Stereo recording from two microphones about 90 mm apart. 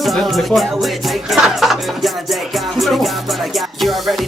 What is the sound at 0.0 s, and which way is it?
Music, centre (ahead or behind).